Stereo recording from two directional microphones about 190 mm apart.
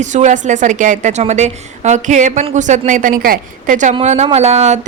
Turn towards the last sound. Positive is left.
turn(degrees=-35)  # may be behind; listen again after turning